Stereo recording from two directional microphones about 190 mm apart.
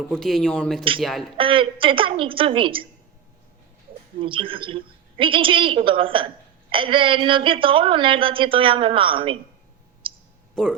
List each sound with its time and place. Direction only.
0.1 s speech: centre (ahead or behind)
1.4 s a woman's voice: 25° right (ahead or behind)
4.2 s a woman's voice: 25° right (ahead or behind)
10.0 s a sound: 25° right (ahead or behind)
10.5 s speech: 5° left (ahead or behind)